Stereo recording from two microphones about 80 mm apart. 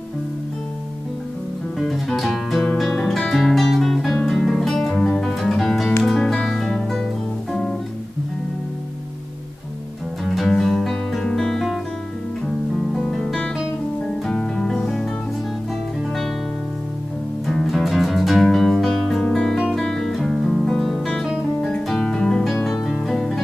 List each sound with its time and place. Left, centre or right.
1.8 s music: centre
10.2 s music: centre
12.9 s guitar: centre
14.2 s music: centre
17.5 s music: centre